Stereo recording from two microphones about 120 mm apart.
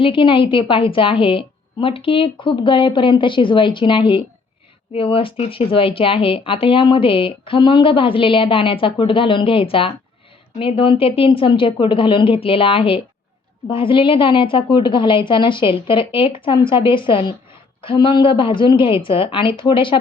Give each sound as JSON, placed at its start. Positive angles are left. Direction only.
{"t": 0.0, "sound": "speech", "side_deg": 45}